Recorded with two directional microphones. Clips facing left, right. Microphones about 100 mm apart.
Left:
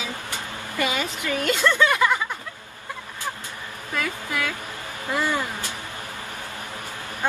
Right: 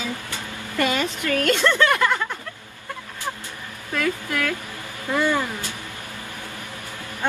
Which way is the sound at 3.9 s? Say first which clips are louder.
Right 4 dB; 5° left (ahead or behind).